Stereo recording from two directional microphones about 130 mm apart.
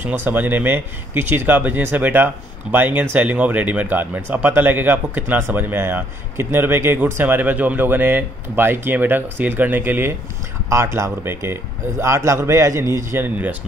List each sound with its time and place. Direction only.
0.2 s a man's voice: 15° right (ahead or behind)